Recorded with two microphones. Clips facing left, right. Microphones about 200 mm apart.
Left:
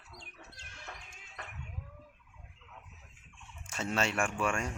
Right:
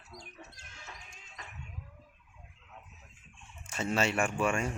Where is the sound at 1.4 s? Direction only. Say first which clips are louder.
Left 3 dB; 60° left (ahead or behind).